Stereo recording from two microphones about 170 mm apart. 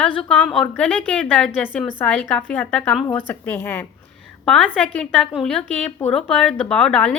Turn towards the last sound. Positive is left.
turn(degrees=5)  # may be behind; listen again after turning